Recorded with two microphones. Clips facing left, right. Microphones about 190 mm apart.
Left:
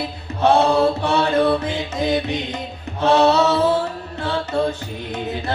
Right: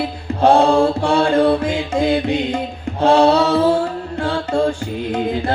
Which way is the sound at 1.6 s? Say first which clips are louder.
Right 5 dB; 10° right (ahead or behind).